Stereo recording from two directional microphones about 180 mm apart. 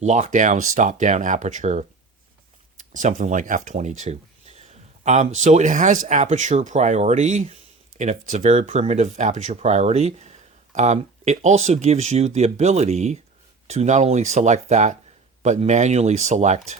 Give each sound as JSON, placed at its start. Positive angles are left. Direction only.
{"t": 0.0, "sound": "speech", "side_deg": -45}